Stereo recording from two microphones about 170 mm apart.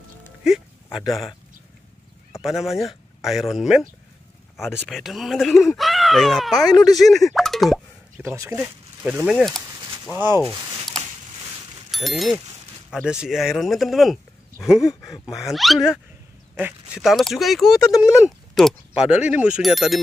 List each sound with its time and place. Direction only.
0.5 s a sound: 5° right (ahead or behind)
0.9 s speech: centre (ahead or behind)
2.4 s speech: centre (ahead or behind)
4.8 s speech: centre (ahead or behind)
8.2 s speech: 15° right (ahead or behind)
10.1 s speech: 15° right (ahead or behind)
11.9 s speech: centre (ahead or behind)
14.8 s speech: 20° left (ahead or behind)
15.3 s speech: centre (ahead or behind)